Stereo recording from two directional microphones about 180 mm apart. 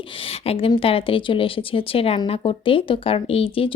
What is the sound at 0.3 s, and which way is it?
A woman's voice, 30° left (ahead or behind).